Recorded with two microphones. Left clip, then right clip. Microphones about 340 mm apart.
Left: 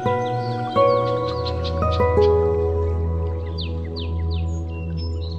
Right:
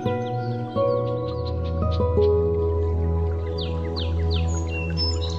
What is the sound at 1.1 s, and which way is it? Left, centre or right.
Music, left.